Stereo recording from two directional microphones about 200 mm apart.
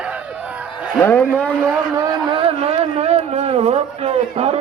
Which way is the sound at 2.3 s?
30° right (ahead or behind).